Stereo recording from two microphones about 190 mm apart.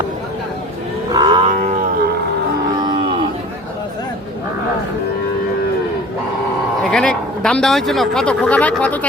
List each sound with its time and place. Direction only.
1.1 s livestock: 25° right (ahead or behind)
6.9 s speech: 5° left (ahead or behind)